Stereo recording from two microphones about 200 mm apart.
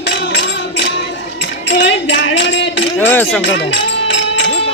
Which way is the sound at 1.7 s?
65° left (ahead or behind).